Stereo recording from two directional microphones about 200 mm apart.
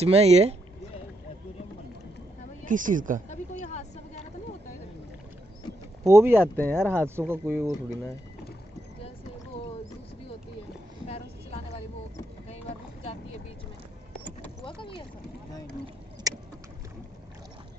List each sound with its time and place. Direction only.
0.0 s speech: 30° right (ahead or behind)
2.7 s speech: 40° right (ahead or behind)
3.3 s vehicle: 35° left (ahead or behind)
6.0 s speech: 15° right (ahead or behind)
6.5 s speech: 10° left (ahead or behind)
6.8 s speech: 10° right (ahead or behind)
11.1 s vehicle: 30° left (ahead or behind)
12.4 s boat: 30° left (ahead or behind)
14.6 s vehicle: 25° left (ahead or behind)
16.3 s vehicle: 20° right (ahead or behind)